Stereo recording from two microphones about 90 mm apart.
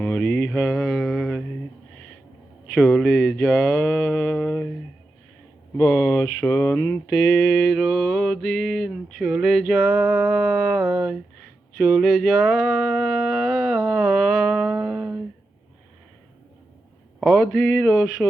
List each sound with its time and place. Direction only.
0.2 s mantra: 10° left (ahead or behind)
2.6 s speech: 5° left (ahead or behind)
5.7 s speech: 15° left (ahead or behind)
6.7 s a sound: 25° left (ahead or behind)
7.3 s mantra: 10° left (ahead or behind); by 11.2 s 10° right (ahead or behind)
11.8 s a sound: 5° right (ahead or behind)
17.2 s mantra: centre (ahead or behind)